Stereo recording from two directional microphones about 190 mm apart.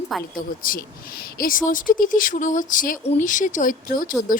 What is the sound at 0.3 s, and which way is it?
Speech, 45° left (ahead or behind).